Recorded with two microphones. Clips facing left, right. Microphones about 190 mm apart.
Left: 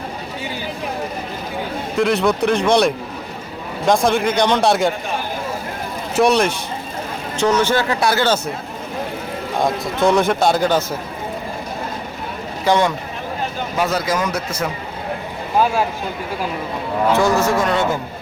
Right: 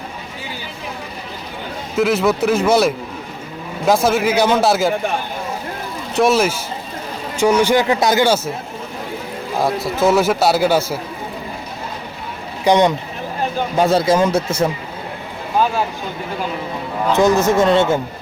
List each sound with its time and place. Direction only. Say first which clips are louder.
2.0 s a man's voice: right 1 dB; 5° right (ahead or behind)
6.1 s a man's voice: even; centre (ahead or behind)
9.6 s a man's voice: right 1 dB; 5° right (ahead or behind)
12.6 s speech: right 3 dB; 20° right (ahead or behind)
13.7 s a man's voice: right 6 dB; 30° right (ahead or behind)
17.2 s a man's voice: right 6 dB; 20° right (ahead or behind)